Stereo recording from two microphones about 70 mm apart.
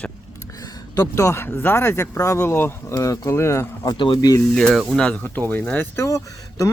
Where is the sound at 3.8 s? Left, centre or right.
Left.